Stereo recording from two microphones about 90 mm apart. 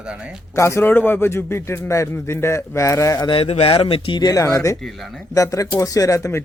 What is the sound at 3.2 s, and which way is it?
Speech, 85° left.